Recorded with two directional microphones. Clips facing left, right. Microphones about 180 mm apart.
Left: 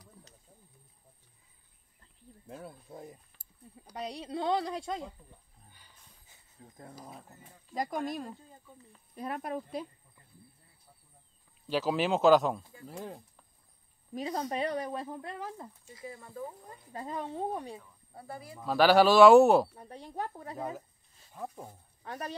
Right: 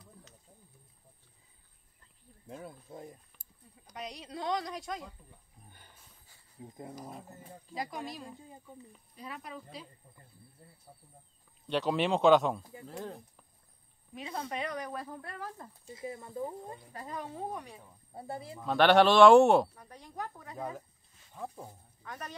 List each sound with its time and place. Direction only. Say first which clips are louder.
2.4 s speech: even; centre (ahead or behind)
3.8 s speech: left 4 dB; 35° left (ahead or behind)
6.6 s speech: right 5 dB; 15° right (ahead or behind)
7.7 s speech: left 6 dB; 50° left (ahead or behind)
11.6 s speech: even; centre (ahead or behind)
14.1 s speech: left 5 dB; 35° left (ahead or behind); by 15.7 s 15° left (ahead or behind)
15.8 s speech: right 4 dB; 25° right (ahead or behind)
16.9 s speech: left 6 dB; 25° left (ahead or behind)
18.1 s speech: right 3 dB; 25° right (ahead or behind)
18.6 s speech: even; 5° left (ahead or behind)
19.7 s speech: left 5 dB; 30° left (ahead or behind)
20.5 s speech: right 2 dB; 5° left (ahead or behind)
22.0 s speech: left 4 dB; 30° left (ahead or behind)